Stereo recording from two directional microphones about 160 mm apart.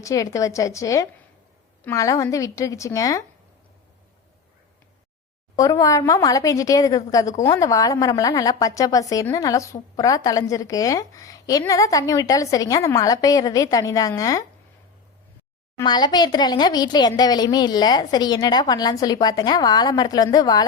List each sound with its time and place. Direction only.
0.0 s a woman's voice: 20° left (ahead or behind)
5.5 s a woman's voice: 20° left (ahead or behind)
15.8 s a woman's voice: 25° left (ahead or behind)